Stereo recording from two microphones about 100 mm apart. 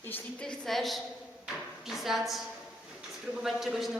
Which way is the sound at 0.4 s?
5° left (ahead or behind).